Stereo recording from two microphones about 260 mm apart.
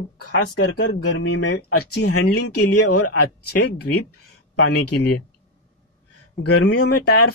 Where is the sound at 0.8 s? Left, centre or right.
Left.